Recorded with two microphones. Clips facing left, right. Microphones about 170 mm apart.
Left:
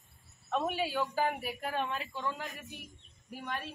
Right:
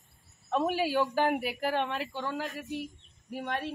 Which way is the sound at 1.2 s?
75° right (ahead or behind).